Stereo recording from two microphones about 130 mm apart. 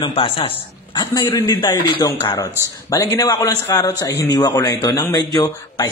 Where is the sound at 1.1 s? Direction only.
25° left (ahead or behind).